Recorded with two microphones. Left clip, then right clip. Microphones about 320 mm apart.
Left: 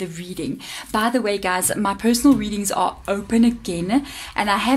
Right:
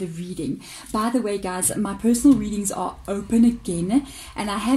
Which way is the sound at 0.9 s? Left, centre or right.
Left.